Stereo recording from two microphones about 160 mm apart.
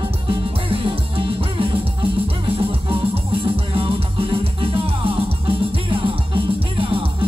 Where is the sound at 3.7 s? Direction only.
35° right (ahead or behind).